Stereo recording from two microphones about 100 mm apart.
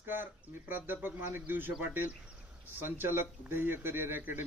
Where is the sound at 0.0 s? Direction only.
20° right (ahead or behind).